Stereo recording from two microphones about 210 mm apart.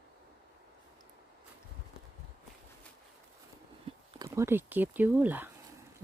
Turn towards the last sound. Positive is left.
turn(degrees=-10)  # may be behind; listen again after turning